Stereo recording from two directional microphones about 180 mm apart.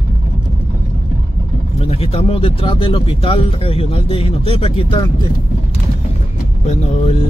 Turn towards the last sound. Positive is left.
turn(degrees=35)  # may be behind; listen again after turning